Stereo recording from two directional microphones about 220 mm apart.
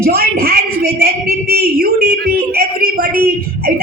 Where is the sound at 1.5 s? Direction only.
45° right (ahead or behind).